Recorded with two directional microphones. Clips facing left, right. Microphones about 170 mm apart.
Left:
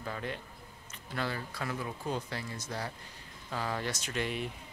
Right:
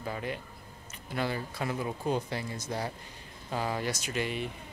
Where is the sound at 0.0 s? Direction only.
10° right (ahead or behind).